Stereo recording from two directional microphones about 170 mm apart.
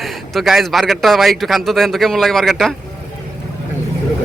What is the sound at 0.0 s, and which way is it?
A man's voice, centre (ahead or behind).